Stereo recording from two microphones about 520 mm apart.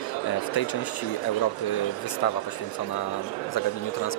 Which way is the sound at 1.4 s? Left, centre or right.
Left.